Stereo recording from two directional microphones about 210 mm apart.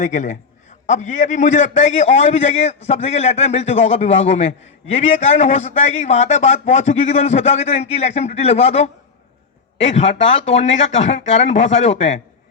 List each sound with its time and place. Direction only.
0.0 s a man's voice: 35° left (ahead or behind)